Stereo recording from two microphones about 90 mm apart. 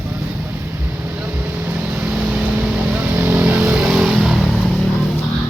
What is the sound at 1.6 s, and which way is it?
Vehicle, 20° right (ahead or behind).